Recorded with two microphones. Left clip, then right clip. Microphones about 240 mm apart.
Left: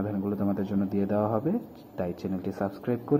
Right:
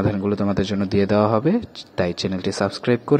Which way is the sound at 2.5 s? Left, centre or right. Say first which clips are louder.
Right 11 dB; right.